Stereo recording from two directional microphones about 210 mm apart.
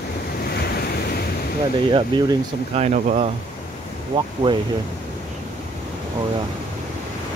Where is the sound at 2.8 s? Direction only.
35° right (ahead or behind).